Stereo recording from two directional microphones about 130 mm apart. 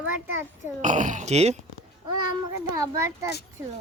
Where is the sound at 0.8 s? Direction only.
70° right (ahead or behind).